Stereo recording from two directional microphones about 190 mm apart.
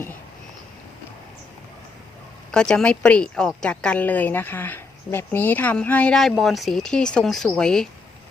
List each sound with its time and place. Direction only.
2.5 s a woman's voice: 5° left (ahead or behind)